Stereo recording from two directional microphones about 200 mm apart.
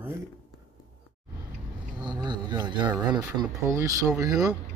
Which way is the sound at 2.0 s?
20° right (ahead or behind).